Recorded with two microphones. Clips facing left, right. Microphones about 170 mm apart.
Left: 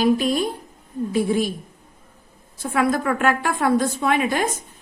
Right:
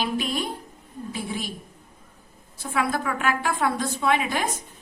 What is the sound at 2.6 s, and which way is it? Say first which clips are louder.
A woman's voice: left 5 dB; 50° left (ahead or behind).